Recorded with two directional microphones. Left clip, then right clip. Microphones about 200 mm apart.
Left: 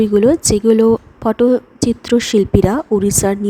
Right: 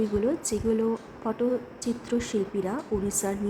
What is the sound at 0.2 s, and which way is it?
A woman's voice, 50° left (ahead or behind).